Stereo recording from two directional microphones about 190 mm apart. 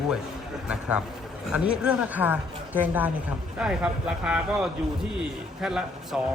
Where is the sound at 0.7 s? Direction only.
5° right (ahead or behind).